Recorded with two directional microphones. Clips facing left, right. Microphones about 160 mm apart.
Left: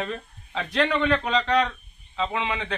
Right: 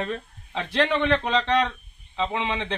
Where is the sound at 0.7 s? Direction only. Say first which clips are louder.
Right 1 dB; 30° right (ahead or behind).